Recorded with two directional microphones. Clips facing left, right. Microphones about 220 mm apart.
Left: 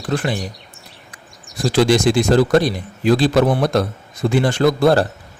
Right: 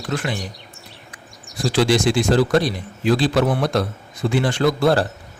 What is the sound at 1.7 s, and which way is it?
Speech, 45° left (ahead or behind).